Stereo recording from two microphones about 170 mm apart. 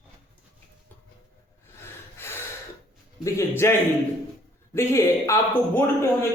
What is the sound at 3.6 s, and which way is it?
Speech, 15° left (ahead or behind).